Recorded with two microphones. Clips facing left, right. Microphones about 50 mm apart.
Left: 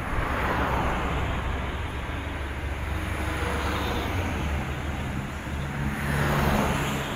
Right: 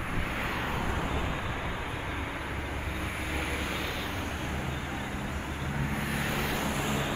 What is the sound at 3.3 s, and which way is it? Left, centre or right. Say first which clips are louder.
Vehicle: left 5 dB; left.